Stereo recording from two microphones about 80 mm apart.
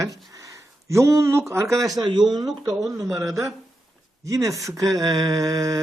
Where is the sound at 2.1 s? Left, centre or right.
Right.